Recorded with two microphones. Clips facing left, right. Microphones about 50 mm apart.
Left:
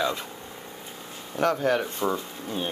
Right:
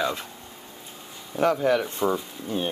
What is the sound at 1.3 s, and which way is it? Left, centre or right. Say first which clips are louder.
Speech: right 2 dB; left.